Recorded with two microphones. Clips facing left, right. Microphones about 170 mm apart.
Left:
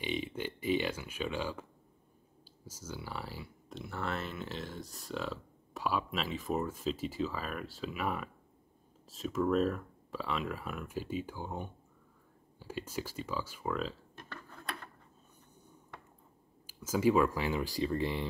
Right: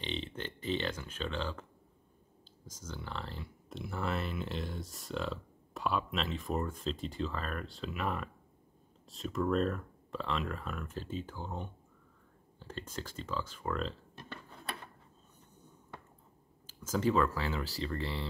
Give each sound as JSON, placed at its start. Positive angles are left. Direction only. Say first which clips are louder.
{"t": 0.0, "sound": "speech", "louder": "left 3 dB", "side_deg": 10}
{"t": 16.6, "sound": "speech", "louder": "left 3 dB", "side_deg": 10}